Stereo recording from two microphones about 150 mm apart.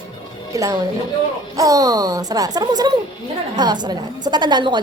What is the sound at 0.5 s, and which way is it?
A woman's voice, 25° right (ahead or behind).